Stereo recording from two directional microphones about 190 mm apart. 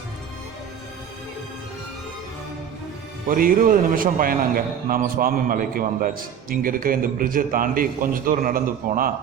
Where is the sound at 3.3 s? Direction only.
45° right (ahead or behind).